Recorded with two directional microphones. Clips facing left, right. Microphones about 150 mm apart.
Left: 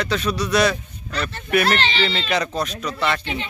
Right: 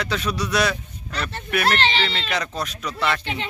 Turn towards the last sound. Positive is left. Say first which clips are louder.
# left 1 dB
turn(degrees=-5)  # may be behind; listen again after turning